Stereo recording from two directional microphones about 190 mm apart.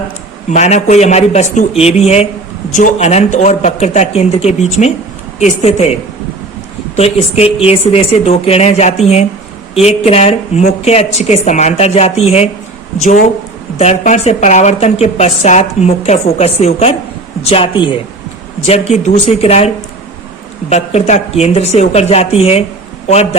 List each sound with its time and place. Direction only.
0.5 s a woman's voice: 35° left (ahead or behind)